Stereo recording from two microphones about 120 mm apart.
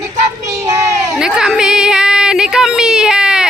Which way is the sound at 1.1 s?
5° right (ahead or behind).